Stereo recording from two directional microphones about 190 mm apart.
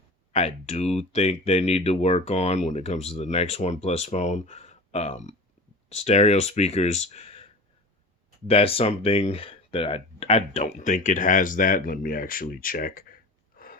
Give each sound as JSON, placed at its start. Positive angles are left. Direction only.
{"t": 0.3, "sound": "speech", "side_deg": 35}
{"t": 13.6, "sound": "gasp", "side_deg": 50}